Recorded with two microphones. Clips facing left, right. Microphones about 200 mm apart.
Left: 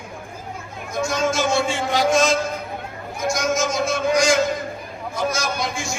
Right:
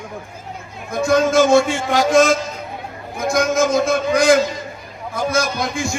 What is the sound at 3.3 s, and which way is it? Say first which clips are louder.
A man's voice: right 6 dB; 55° right (ahead or behind).